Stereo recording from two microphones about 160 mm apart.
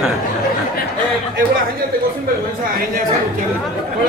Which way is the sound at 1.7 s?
65° right (ahead or behind).